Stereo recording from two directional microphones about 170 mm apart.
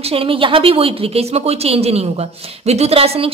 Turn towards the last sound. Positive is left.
turn(degrees=-35)  # may be behind; listen again after turning